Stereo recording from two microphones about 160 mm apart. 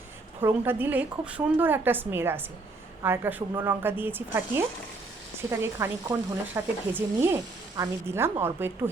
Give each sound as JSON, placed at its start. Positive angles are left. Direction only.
{"t": 0.3, "sound": "speech", "side_deg": -15}